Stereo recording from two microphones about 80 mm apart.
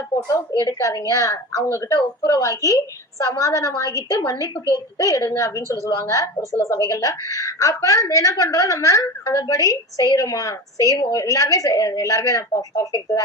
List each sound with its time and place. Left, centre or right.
0.6 s a woman's voice: left